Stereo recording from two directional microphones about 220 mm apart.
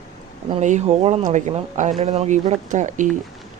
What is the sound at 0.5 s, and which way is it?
Speech, 30° right (ahead or behind).